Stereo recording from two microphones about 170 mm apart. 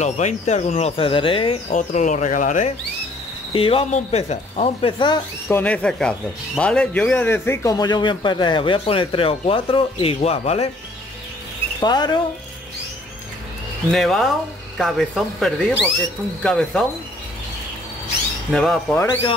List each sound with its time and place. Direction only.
0.0 s speech: 40° left (ahead or behind)
1.7 s speech: 45° left (ahead or behind)
3.5 s speech: 35° left (ahead or behind)
5.5 s speech: 10° left (ahead or behind); by 10.7 s 35° left (ahead or behind)
11.8 s speech: 25° left (ahead or behind)
13.9 s speech: centre (ahead or behind)
18.5 s speech: centre (ahead or behind)